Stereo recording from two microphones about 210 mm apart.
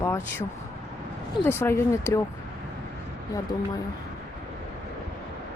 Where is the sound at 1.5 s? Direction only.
10° left (ahead or behind).